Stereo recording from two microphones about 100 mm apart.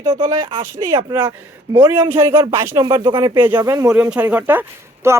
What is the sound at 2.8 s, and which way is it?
Speech, 50° right (ahead or behind).